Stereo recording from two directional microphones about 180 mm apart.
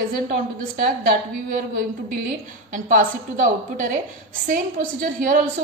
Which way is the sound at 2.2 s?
50° right (ahead or behind).